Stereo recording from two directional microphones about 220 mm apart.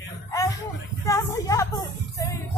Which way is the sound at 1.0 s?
15° left (ahead or behind).